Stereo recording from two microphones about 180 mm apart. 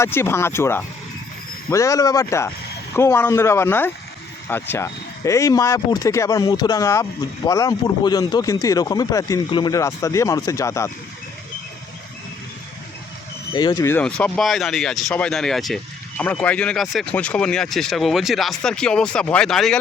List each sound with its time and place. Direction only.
0.0 s speech: 15° left (ahead or behind)
13.5 s speech: 25° left (ahead or behind); by 19.8 s centre (ahead or behind)